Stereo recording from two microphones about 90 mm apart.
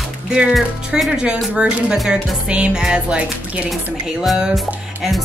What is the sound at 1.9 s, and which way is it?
Speech, centre (ahead or behind).